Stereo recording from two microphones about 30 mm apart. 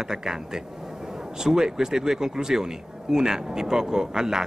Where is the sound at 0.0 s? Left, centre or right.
Centre.